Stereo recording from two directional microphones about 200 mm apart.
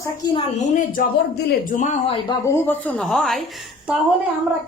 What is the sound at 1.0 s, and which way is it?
Speech, 45° left (ahead or behind).